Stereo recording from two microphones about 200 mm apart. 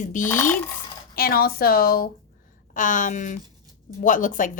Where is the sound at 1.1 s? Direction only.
50° left (ahead or behind).